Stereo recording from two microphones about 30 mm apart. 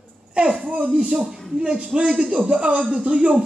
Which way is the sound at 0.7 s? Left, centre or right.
Right.